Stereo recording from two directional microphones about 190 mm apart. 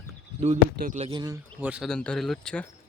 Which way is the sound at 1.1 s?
20° right (ahead or behind).